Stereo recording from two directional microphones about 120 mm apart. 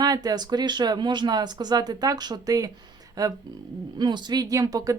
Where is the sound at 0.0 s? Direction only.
35° right (ahead or behind).